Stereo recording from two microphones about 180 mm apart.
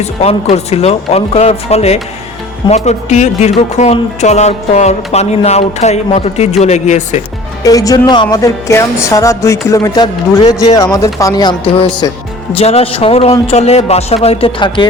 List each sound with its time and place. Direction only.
0.0 s speech: 35° left (ahead or behind)
7.6 s music: 20° left (ahead or behind)
12.5 s speech: 35° left (ahead or behind)